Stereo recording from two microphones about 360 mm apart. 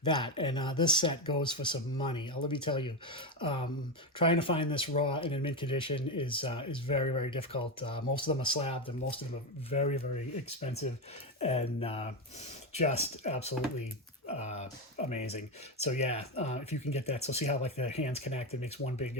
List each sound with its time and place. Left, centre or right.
0.0 s speech: centre